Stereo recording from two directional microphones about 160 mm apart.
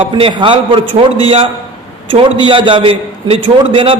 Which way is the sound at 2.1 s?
35° right (ahead or behind).